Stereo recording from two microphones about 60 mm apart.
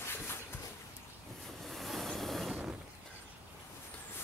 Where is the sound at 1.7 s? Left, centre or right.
Centre.